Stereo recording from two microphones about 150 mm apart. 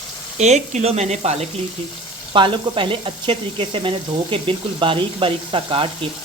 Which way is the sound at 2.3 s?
35° right (ahead or behind).